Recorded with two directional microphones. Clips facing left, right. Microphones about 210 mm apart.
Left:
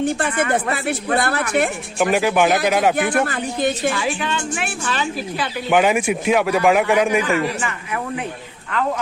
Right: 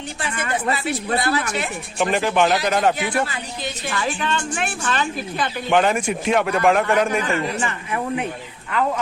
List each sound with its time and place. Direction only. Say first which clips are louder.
0.0 s speech: left 9 dB; 55° left (ahead or behind)
2.0 s a woman's voice: left 2 dB; 5° left (ahead or behind)
2.9 s speech: left 4 dB; 55° left (ahead or behind)
3.9 s a woman's voice: left 1 dB; 10° left (ahead or behind)